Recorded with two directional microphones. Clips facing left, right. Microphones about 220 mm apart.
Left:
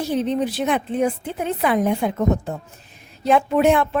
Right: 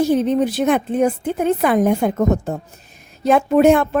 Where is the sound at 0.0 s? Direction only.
45° right (ahead or behind).